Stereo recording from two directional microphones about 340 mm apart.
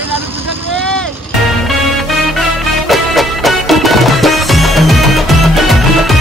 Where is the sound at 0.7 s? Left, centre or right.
Centre.